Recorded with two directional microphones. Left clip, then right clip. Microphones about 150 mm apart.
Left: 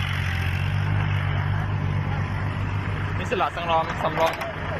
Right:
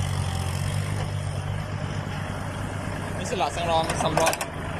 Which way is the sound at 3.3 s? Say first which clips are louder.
Left 2 dB; 25° right (ahead or behind).